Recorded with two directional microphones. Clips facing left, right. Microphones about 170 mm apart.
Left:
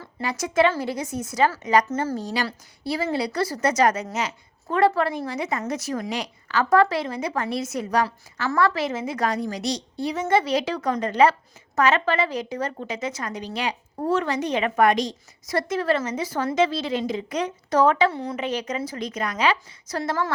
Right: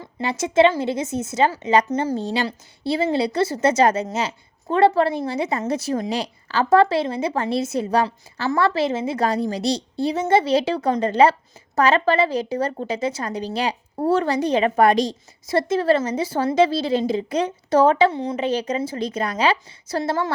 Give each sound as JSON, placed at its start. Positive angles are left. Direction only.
{"t": 0.0, "sound": "a woman's voice", "side_deg": -25}
{"t": 1.9, "sound": "a woman's voice", "side_deg": -15}
{"t": 2.1, "sound": "a woman's voice", "side_deg": -25}
{"t": 18.3, "sound": "a woman's voice", "side_deg": -30}